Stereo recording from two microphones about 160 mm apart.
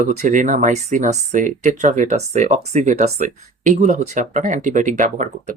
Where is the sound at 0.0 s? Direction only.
55° right (ahead or behind).